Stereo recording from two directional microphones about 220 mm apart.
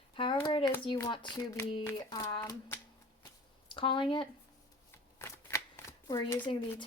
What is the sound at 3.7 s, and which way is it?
Speech, 20° left (ahead or behind).